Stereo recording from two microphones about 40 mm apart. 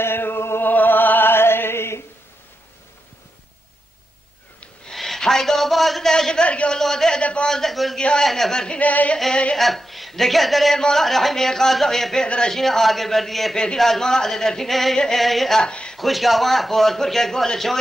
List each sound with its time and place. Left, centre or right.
0.0 s music: left
0.7 s music: left
4.9 s a sound: centre
6.1 s a man's voice: centre
6.4 s a man's voice: left
6.8 s a sound: centre
7.2 s speech: left
7.4 s a man's voice: centre
8.7 s singing: left
9.3 s speech: left
9.6 s a man's voice: centre
10.8 s a man's voice: centre
15.6 s speech: left
16.0 s a man's voice: centre